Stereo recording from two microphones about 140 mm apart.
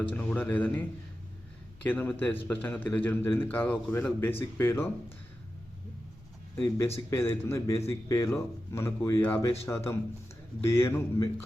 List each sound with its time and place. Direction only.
0.1 s a man's voice: 10° left (ahead or behind)
6.6 s a man's voice: 20° left (ahead or behind)